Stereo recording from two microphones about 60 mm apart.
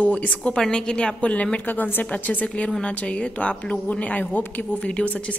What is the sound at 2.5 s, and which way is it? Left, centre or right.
A woman's voice, centre.